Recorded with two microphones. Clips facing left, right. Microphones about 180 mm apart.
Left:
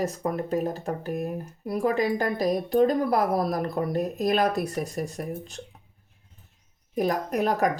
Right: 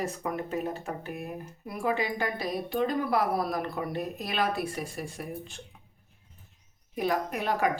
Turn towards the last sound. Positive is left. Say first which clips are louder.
# left 4 dB
turn(degrees=40)  # may be behind; listen again after turning